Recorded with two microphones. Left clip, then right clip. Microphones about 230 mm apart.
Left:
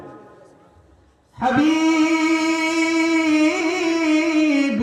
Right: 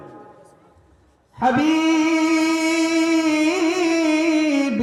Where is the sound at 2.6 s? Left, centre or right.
Right.